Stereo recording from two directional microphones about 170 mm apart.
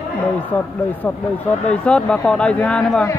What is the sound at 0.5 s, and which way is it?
Speech, 10° left (ahead or behind).